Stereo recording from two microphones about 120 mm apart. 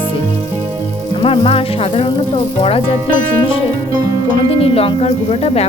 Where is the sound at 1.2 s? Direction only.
50° left (ahead or behind).